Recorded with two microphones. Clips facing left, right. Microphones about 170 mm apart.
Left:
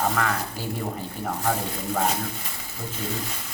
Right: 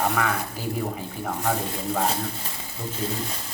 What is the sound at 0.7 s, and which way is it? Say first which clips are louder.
Speech: right 1 dB; 5° right (ahead or behind).